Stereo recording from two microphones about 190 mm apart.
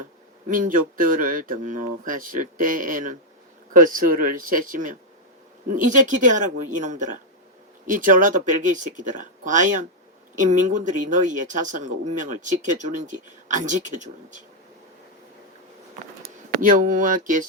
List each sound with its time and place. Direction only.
0.4 s speech: 45° right (ahead or behind)
16.2 s speech: 45° right (ahead or behind)